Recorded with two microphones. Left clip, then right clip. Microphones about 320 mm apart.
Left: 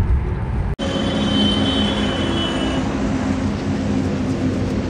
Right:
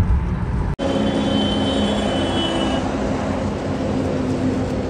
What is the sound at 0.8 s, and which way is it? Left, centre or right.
Vehicle, right.